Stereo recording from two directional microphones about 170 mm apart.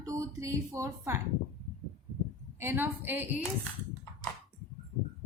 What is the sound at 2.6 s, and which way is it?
Speech, 15° right (ahead or behind).